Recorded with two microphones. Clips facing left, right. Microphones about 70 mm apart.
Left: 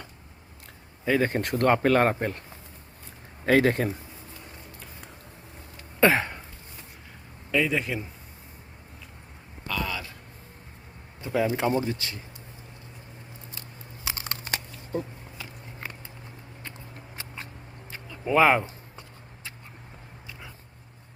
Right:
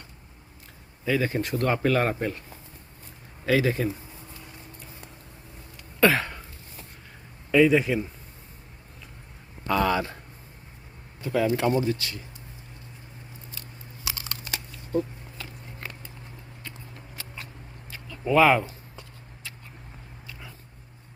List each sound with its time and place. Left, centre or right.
1.0 s speech: left
3.4 s speech: left
6.0 s a sound: left
7.5 s a man's voice: centre
9.9 s speech: right
11.2 s speech: centre
14.0 s crumpling: left
14.9 s a sound: centre
17.2 s a sound: left